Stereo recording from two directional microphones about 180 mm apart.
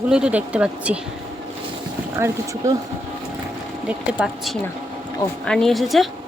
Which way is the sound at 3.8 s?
5° right (ahead or behind).